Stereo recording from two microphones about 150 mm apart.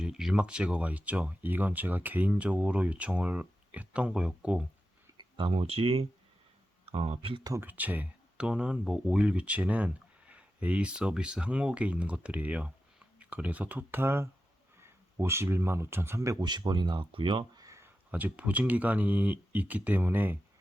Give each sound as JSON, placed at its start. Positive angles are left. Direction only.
{"t": 0.0, "sound": "speech", "side_deg": -5}
{"t": 5.1, "sound": "speech", "side_deg": -35}
{"t": 7.4, "sound": "speech", "side_deg": -15}
{"t": 17.7, "sound": "speech", "side_deg": -15}